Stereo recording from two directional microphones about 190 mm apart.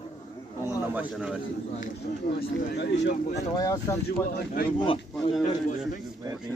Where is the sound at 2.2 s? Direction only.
55° left (ahead or behind).